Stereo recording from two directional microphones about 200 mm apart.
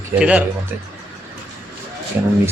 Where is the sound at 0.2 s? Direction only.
5° right (ahead or behind).